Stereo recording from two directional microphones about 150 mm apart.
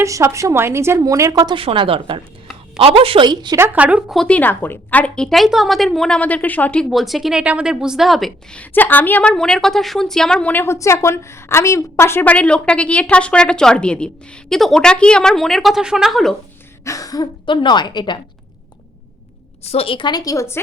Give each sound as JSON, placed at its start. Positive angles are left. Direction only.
{"t": 0.0, "sound": "a woman's voice", "side_deg": -20}
{"t": 3.6, "sound": "speech", "side_deg": -10}
{"t": 4.2, "sound": "speech", "side_deg": 10}
{"t": 16.8, "sound": "speech", "side_deg": 20}
{"t": 19.6, "sound": "speech", "side_deg": 40}